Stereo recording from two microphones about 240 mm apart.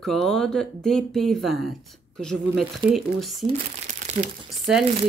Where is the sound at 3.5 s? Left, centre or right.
Right.